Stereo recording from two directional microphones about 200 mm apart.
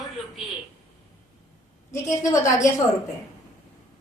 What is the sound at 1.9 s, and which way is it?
Speech, 15° left (ahead or behind).